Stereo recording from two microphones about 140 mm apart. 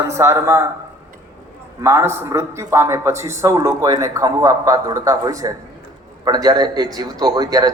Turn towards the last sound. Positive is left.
turn(degrees=-25)  # may be behind; listen again after turning